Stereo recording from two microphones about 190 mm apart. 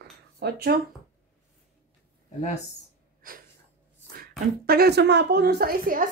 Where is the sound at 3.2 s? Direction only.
50° right (ahead or behind).